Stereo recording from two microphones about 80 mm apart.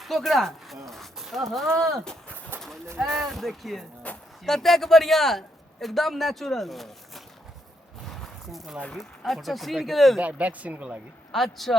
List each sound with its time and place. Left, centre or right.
0.0 s speech: centre
0.9 s a sound: centre
3.0 s a man's voice: centre
4.1 s speech: centre
4.4 s a man's voice: centre
8.0 s a sound: centre
9.0 s a man's voice: centre
10.2 s speech: centre
11.3 s a man's voice: centre